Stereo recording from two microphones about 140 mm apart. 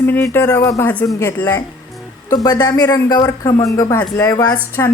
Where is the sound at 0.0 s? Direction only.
15° left (ahead or behind).